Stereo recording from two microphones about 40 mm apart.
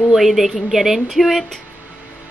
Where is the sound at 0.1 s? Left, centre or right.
Centre.